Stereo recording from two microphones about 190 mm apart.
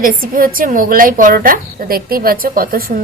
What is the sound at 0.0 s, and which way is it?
A woman's voice, 45° right (ahead or behind).